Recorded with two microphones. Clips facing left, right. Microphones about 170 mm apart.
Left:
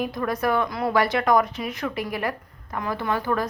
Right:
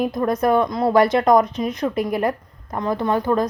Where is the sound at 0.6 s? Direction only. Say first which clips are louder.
Right 6 dB; 35° right (ahead or behind).